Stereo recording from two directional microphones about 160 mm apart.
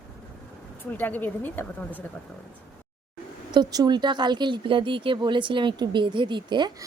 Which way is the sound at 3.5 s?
25° right (ahead or behind).